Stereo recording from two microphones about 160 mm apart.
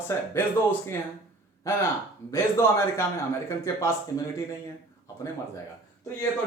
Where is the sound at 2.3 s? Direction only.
15° left (ahead or behind).